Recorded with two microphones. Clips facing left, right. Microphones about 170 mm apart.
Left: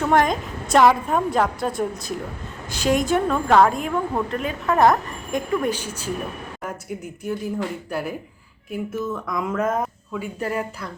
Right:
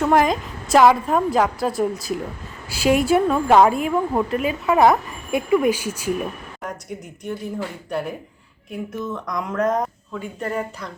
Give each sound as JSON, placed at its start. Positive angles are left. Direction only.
{"t": 0.0, "sound": "a woman's voice", "side_deg": 0}
{"t": 7.3, "sound": "speech", "side_deg": 5}